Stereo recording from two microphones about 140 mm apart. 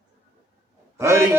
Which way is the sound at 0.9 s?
20° right (ahead or behind).